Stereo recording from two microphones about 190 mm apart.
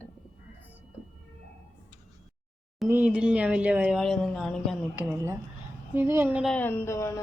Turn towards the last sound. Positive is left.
turn(degrees=15)  # may be behind; listen again after turning